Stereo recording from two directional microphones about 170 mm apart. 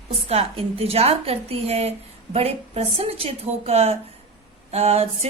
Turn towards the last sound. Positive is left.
turn(degrees=-35)  # may be behind; listen again after turning